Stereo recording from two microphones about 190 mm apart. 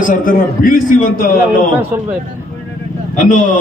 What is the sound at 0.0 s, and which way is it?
A man's voice, 45° left (ahead or behind).